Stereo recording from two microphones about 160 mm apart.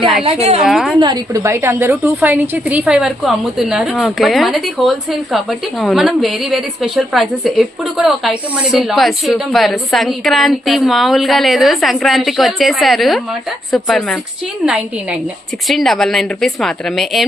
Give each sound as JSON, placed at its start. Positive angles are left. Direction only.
{"t": 0.3, "sound": "a woman's voice", "side_deg": -40}
{"t": 0.6, "sound": "a woman's voice", "side_deg": 0}
{"t": 0.9, "sound": "a woman's voice", "side_deg": -25}